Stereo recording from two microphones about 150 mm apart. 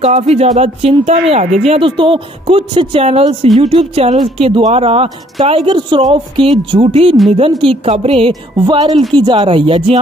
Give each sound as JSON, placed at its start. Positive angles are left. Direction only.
{"t": 0.0, "sound": "speech", "side_deg": -50}
{"t": 8.6, "sound": "a woman's voice", "side_deg": -25}